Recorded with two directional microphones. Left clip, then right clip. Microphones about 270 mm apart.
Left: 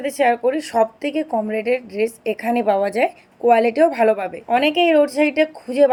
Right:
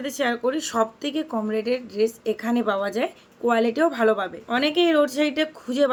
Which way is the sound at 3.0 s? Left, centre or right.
Right.